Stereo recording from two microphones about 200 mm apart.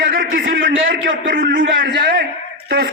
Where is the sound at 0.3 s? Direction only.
45° right (ahead or behind).